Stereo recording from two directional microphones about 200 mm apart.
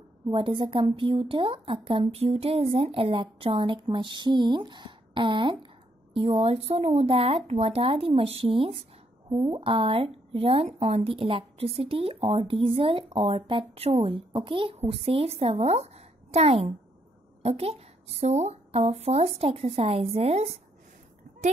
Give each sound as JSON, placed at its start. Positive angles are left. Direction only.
{"t": 0.3, "sound": "speech", "side_deg": -25}